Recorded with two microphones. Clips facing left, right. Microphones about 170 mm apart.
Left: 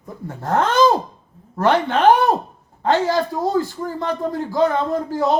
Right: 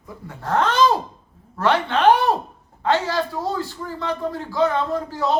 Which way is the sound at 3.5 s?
45° left (ahead or behind).